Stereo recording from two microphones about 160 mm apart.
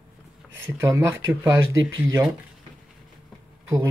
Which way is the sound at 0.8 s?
15° right (ahead or behind).